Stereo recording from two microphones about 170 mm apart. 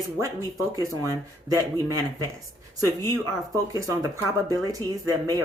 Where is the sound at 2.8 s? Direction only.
20° right (ahead or behind).